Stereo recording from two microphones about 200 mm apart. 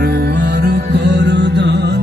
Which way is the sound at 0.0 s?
55° right (ahead or behind).